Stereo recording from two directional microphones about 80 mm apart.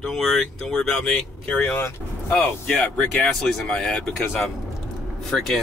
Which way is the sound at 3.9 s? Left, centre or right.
Centre.